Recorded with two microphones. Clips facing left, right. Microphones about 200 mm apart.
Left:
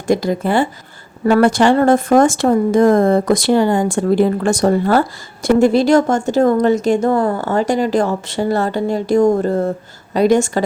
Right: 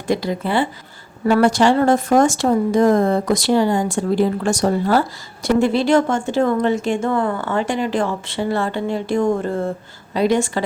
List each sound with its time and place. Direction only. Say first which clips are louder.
0.1 s speech: left 4 dB; 45° left (ahead or behind)